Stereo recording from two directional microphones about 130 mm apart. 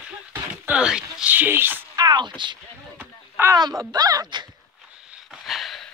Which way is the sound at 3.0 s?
15° right (ahead or behind).